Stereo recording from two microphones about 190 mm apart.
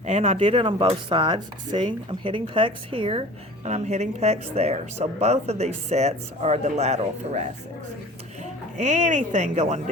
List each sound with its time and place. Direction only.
0.0 s speech: 35° right (ahead or behind)
8.8 s speech: 40° right (ahead or behind)